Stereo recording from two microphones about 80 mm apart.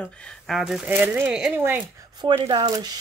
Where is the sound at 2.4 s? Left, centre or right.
Right.